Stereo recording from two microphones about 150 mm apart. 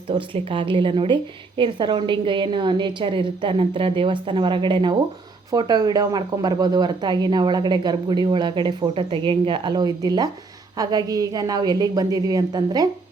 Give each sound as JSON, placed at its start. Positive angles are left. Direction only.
{"t": 0.1, "sound": "a woman's voice", "side_deg": -35}